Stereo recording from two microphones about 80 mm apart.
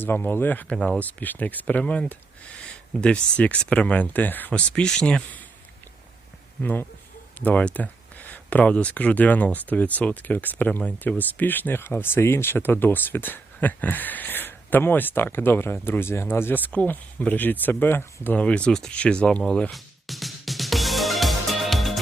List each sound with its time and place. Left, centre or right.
0.0 s speech: left
4.7 s speech: centre
6.6 s speech: centre
18.3 s speech: centre
19.7 s music: centre